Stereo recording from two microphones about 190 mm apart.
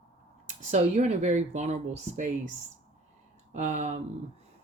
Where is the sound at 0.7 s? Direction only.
35° right (ahead or behind).